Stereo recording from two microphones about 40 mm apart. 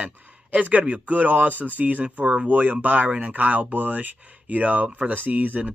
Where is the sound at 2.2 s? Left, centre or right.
Right.